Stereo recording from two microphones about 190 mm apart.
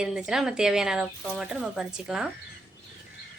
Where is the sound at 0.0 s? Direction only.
5° right (ahead or behind).